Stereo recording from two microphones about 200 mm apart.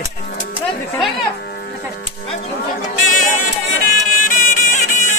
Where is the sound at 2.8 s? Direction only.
40° left (ahead or behind).